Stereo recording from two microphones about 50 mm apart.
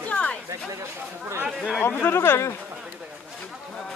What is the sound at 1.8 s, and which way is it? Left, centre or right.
Speech, left.